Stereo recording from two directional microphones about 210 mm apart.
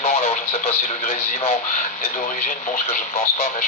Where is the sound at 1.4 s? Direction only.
30° left (ahead or behind).